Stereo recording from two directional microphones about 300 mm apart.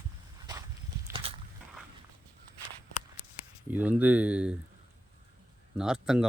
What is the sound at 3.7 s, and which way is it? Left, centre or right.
Speech, centre.